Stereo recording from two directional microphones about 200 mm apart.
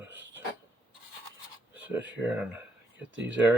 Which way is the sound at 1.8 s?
10° right (ahead or behind).